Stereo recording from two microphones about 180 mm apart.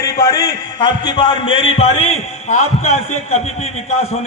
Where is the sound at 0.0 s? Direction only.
20° left (ahead or behind).